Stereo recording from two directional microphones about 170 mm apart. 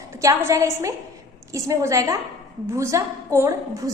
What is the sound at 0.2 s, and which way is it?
A woman's voice, 20° right (ahead or behind).